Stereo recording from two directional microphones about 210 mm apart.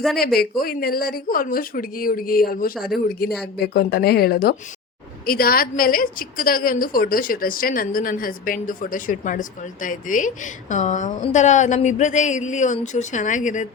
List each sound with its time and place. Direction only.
0.3 s a woman's voice: 45° left (ahead or behind)